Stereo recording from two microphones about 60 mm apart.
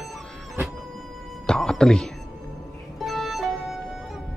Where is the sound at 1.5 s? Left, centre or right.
Centre.